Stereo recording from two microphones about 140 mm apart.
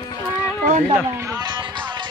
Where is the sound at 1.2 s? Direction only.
30° right (ahead or behind).